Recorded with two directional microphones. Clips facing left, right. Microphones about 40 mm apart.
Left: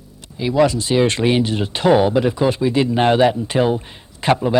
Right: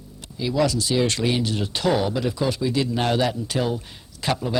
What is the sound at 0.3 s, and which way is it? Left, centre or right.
Speech, left.